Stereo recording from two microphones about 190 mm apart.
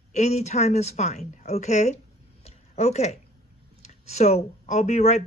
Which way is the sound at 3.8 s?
35° left (ahead or behind).